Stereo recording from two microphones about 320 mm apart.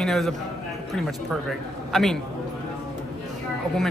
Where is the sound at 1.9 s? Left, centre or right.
Centre.